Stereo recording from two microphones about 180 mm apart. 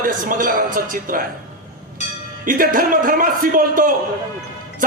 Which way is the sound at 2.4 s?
50° right (ahead or behind).